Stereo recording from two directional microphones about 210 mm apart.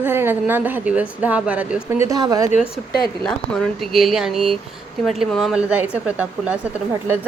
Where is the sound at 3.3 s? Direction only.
Centre (ahead or behind).